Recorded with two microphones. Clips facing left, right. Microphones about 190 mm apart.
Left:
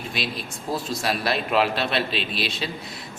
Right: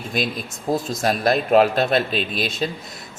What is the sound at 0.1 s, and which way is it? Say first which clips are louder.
Speech: right 7 dB; 45° right (ahead or behind).